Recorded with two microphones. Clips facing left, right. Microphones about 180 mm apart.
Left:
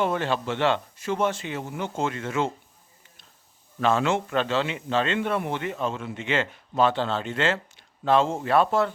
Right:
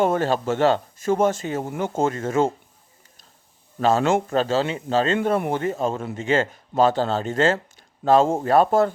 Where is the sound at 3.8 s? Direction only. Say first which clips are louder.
Right 4 dB; 40° right (ahead or behind).